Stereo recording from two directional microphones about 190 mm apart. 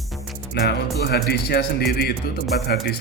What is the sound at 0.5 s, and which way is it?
Speech, 60° left (ahead or behind).